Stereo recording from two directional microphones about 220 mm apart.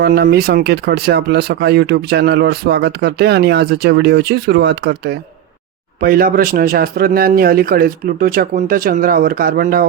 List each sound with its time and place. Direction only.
0.0 s a man's voice: 45° right (ahead or behind)